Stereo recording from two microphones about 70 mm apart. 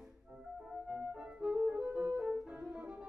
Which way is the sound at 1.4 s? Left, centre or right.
Centre.